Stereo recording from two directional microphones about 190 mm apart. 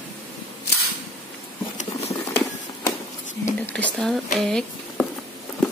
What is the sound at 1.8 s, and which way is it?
Patter, 35° left (ahead or behind).